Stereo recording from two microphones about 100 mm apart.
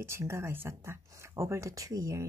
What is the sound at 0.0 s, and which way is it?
Speech, 25° right (ahead or behind).